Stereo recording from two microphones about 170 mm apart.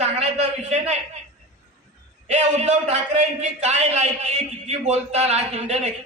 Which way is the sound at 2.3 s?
40° right (ahead or behind).